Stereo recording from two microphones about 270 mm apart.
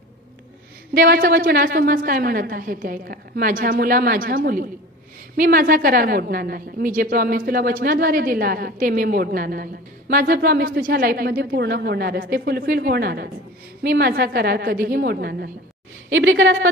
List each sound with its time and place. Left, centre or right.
0.9 s a woman's voice: right
16.1 s a woman's voice: right